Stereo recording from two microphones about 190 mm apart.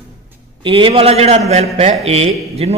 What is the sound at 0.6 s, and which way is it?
A man's voice, 25° right (ahead or behind).